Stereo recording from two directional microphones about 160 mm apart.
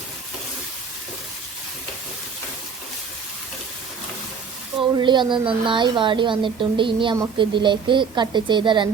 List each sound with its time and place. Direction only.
4.8 s a woman's voice: 30° right (ahead or behind)